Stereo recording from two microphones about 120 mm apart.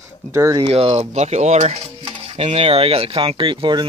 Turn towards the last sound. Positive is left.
turn(degrees=-40)  # may be behind; listen again after turning